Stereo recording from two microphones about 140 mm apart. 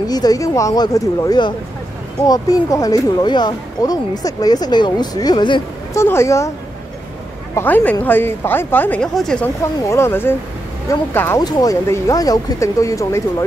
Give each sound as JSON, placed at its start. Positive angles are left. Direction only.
{"t": 0.1, "sound": "speech", "side_deg": 25}
{"t": 5.9, "sound": "speech", "side_deg": 20}
{"t": 7.5, "sound": "speech", "side_deg": 15}
{"t": 9.8, "sound": "speech", "side_deg": 20}